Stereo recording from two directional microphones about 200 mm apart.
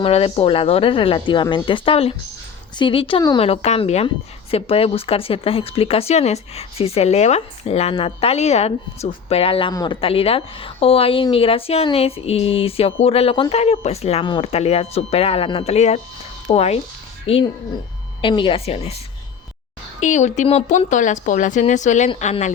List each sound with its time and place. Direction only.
0.0 s speech: 30° left (ahead or behind)
20.0 s speech: 35° left (ahead or behind)